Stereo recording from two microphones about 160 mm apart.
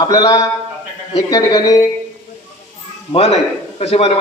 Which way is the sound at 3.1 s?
40° left (ahead or behind).